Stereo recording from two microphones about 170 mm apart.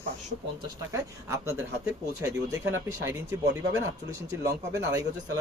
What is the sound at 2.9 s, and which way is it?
Speech, 15° right (ahead or behind).